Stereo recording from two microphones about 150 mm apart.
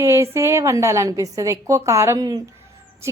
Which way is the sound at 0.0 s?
20° right (ahead or behind).